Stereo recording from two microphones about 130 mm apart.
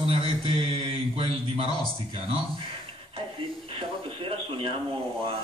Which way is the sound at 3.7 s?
45° right (ahead or behind).